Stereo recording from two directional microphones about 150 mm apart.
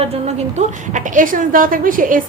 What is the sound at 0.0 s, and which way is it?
A woman's voice, 45° right (ahead or behind).